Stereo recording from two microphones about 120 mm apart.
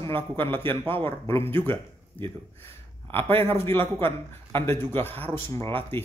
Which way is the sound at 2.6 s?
20° left (ahead or behind).